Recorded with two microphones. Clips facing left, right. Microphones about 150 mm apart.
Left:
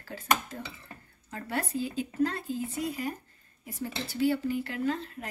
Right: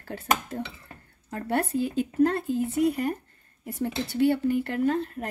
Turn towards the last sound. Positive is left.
turn(degrees=-55)  # may be behind; listen again after turning